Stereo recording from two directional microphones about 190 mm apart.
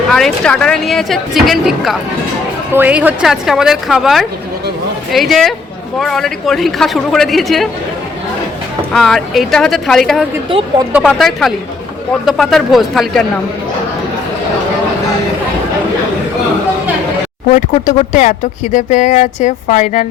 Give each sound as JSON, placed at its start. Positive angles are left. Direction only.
{"t": 0.1, "sound": "a woman's voice", "side_deg": 0}
{"t": 8.9, "sound": "a woman's voice", "side_deg": 0}
{"t": 17.5, "sound": "speech", "side_deg": 40}